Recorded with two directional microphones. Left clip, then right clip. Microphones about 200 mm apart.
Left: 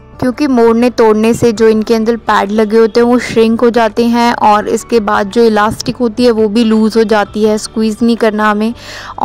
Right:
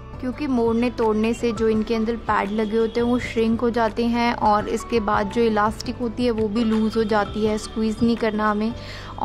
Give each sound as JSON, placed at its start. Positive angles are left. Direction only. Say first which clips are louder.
{"t": 0.2, "sound": "a woman's voice", "louder": "left 13 dB", "side_deg": 40}